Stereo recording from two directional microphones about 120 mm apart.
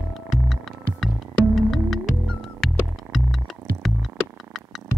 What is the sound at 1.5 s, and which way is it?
Music, centre (ahead or behind).